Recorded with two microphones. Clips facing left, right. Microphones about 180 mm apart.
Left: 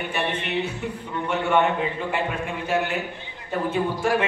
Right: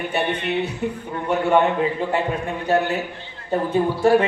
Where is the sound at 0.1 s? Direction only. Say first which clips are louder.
Right 4 dB; 35° right (ahead or behind).